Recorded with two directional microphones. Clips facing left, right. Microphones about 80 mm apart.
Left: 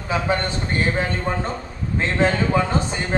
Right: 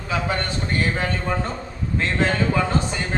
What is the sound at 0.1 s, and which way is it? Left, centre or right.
Speech, left.